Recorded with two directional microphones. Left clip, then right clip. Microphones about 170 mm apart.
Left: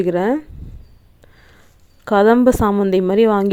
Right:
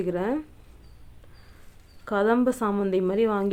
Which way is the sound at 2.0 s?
50° left (ahead or behind).